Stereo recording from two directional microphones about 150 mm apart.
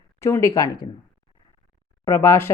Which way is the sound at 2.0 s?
20° left (ahead or behind).